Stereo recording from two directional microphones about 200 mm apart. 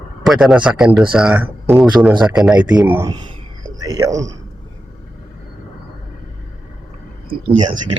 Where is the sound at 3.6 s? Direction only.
20° right (ahead or behind).